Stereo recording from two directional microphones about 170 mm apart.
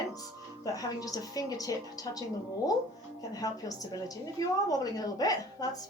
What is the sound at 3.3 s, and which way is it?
A woman's voice, 20° left (ahead or behind).